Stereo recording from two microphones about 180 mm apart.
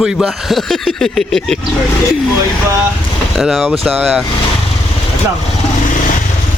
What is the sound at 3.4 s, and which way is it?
Speech, centre (ahead or behind).